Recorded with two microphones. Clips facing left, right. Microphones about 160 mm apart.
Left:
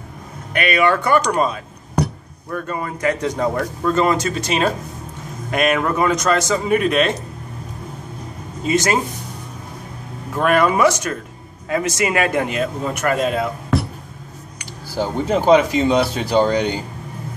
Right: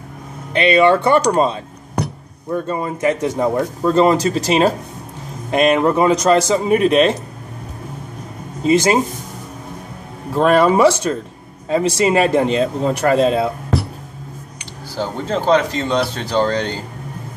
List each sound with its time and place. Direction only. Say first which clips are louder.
0.5 s a man's voice: right 5 dB; 25° right (ahead or behind)
3.8 s speech: right 4 dB; 30° right (ahead or behind)
8.6 s speech: right 5 dB; 30° right (ahead or behind)
10.3 s a man's voice: right 4 dB; 25° right (ahead or behind)
15.0 s speech: left 2 dB; 10° left (ahead or behind)